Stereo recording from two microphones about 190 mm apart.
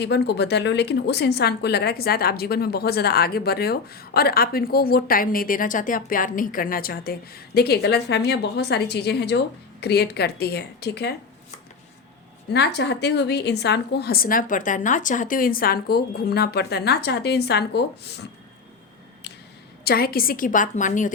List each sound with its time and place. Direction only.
0.0 s a woman's voice: 60° left (ahead or behind)
12.5 s a woman's voice: 60° left (ahead or behind)
19.8 s a woman's voice: 55° left (ahead or behind)